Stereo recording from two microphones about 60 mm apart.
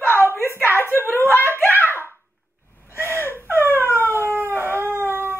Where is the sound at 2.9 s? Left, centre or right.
Left.